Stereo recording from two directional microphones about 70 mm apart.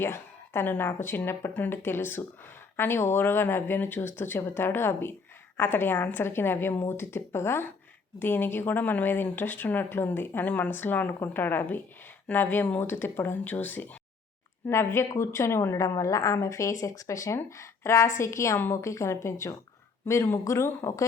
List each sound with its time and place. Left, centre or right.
0.0 s speech: left
14.7 s a woman's voice: left